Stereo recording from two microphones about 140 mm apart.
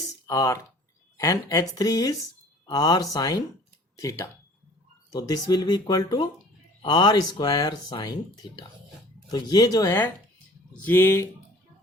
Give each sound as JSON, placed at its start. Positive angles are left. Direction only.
{"t": 0.3, "sound": "speech", "side_deg": 25}
{"t": 5.1, "sound": "speech", "side_deg": 30}